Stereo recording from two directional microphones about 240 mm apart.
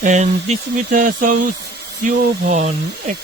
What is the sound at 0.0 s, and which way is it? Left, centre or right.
Speech, right.